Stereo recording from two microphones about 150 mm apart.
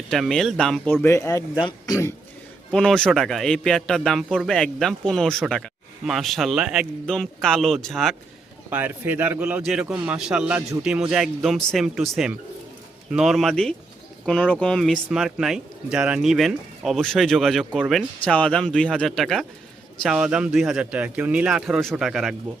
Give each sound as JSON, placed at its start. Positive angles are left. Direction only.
{"t": 0.1, "sound": "a man's voice", "side_deg": 5}
{"t": 1.0, "sound": "speech", "side_deg": 20}
{"t": 2.7, "sound": "a man's voice", "side_deg": 5}
{"t": 8.7, "sound": "a man's voice", "side_deg": -10}